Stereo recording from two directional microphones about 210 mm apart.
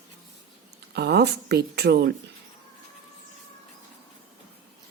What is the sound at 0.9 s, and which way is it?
A woman's voice, 50° right (ahead or behind).